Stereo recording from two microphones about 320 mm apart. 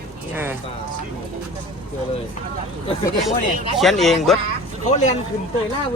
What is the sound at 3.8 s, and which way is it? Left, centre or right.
Speech, centre.